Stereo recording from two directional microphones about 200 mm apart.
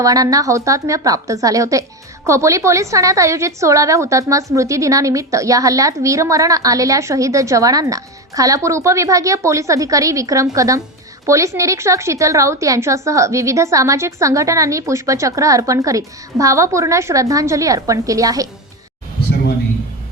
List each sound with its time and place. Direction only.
0.0 s a woman's voice: 15° right (ahead or behind)